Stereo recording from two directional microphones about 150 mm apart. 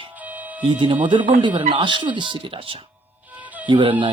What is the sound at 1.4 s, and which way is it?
Speech, 30° right (ahead or behind).